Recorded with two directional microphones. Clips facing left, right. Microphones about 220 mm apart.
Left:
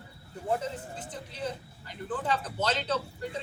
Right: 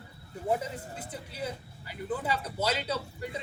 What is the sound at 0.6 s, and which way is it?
Speech, 10° right (ahead or behind).